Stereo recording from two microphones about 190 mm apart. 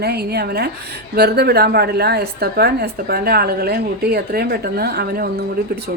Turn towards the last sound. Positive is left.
turn(degrees=-55)  # may be behind; listen again after turning